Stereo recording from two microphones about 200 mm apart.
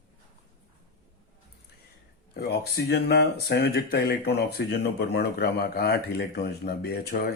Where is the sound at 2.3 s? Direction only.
55° left (ahead or behind).